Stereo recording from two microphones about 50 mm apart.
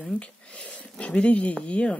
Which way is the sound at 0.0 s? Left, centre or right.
Left.